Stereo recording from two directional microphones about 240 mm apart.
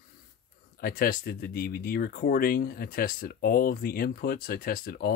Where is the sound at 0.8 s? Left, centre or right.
Left.